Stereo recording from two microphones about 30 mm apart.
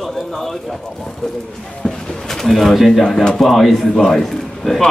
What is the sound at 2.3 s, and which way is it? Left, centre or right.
A man's voice, centre.